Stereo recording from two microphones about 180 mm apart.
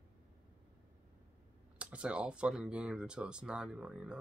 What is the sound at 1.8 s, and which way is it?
Speech, 5° right (ahead or behind).